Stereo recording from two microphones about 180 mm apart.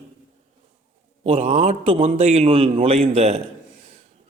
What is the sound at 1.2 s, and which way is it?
Speech, 35° right (ahead or behind).